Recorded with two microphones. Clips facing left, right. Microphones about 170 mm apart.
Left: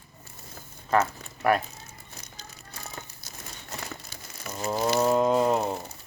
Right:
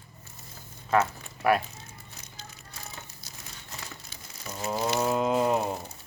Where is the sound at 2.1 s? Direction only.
40° left (ahead or behind).